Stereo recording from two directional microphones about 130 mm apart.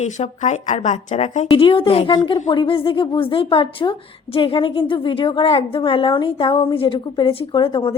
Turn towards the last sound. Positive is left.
turn(degrees=45)  # may be behind; listen again after turning